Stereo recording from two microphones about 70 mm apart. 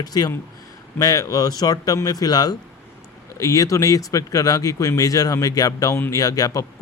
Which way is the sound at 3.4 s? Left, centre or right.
Left.